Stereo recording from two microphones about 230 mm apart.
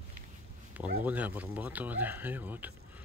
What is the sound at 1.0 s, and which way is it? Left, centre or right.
Speech, centre.